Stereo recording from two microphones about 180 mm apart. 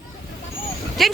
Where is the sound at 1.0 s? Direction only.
Centre (ahead or behind).